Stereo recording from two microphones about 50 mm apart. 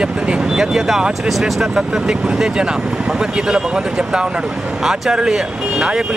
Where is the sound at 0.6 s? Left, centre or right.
Centre.